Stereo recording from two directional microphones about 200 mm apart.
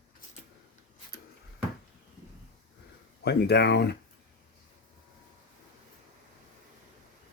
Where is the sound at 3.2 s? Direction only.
55° left (ahead or behind).